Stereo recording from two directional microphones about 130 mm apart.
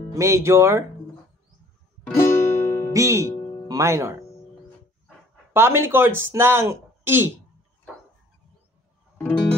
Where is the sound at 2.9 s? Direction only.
25° right (ahead or behind).